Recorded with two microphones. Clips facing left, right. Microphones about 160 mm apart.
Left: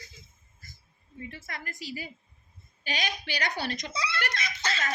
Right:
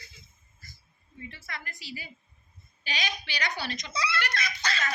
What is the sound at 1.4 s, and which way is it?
A woman's voice, 45° left (ahead or behind).